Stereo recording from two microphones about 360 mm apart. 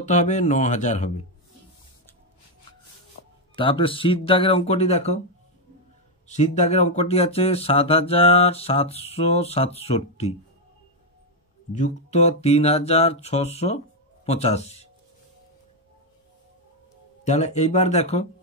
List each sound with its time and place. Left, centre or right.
0.0 s speech: centre
3.5 s speech: centre
6.2 s speech: centre
11.7 s speech: centre
17.2 s speech: centre